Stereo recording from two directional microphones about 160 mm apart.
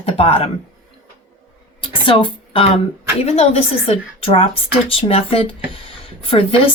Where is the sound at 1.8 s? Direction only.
30° left (ahead or behind).